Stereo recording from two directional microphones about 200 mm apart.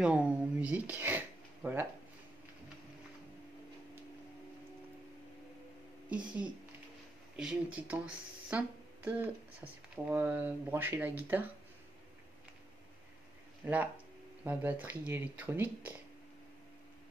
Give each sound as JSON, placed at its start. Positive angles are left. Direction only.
{"t": 0.0, "sound": "speech", "side_deg": -5}
{"t": 7.3, "sound": "speech", "side_deg": -5}
{"t": 13.6, "sound": "speech", "side_deg": -10}